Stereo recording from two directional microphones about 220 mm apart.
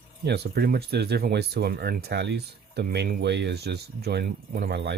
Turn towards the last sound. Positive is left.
turn(degrees=-50)  # may be behind; listen again after turning